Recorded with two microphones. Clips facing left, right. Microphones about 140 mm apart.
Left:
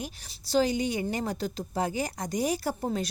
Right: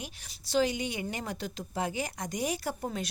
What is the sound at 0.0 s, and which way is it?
A woman's voice, 35° left (ahead or behind).